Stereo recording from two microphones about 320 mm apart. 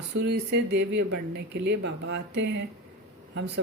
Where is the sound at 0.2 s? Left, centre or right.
Right.